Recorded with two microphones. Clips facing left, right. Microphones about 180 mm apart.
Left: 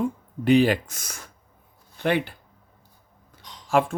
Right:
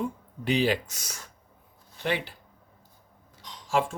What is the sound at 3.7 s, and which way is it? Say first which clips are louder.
Speech: left 5 dB; 60° left (ahead or behind).